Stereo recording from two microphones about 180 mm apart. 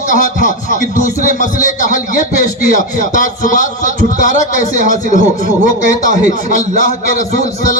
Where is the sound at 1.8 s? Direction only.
45° left (ahead or behind).